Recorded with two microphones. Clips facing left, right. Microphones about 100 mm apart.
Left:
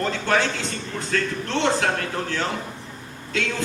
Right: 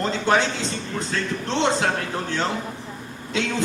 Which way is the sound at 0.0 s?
20° right (ahead or behind).